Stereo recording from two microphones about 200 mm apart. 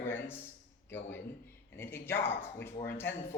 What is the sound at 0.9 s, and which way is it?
A man's voice, 10° left (ahead or behind).